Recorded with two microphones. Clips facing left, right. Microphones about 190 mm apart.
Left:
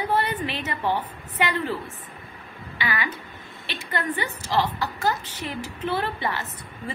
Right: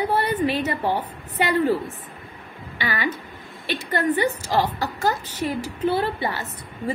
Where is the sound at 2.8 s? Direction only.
40° right (ahead or behind).